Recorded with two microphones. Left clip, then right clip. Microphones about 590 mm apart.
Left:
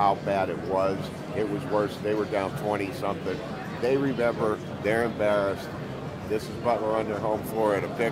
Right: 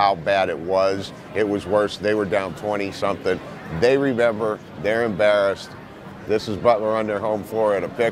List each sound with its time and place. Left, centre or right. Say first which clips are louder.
0.0 s speech: right 6 dB; right
7.6 s speech: right 6 dB; right